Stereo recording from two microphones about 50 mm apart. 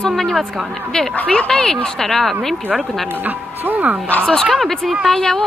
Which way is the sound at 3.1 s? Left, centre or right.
Right.